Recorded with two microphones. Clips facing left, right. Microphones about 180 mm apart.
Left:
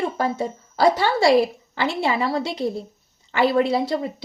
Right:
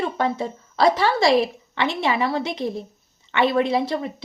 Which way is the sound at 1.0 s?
30° left (ahead or behind).